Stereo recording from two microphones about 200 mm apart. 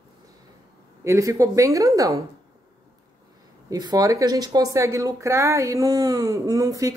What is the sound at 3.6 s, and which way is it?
Speech, 20° right (ahead or behind).